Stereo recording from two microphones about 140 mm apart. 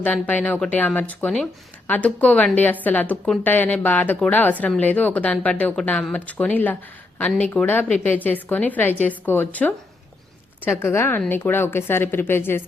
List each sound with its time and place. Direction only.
0.0 s a woman's voice: 10° left (ahead or behind)
10.8 s a woman's voice: 15° left (ahead or behind)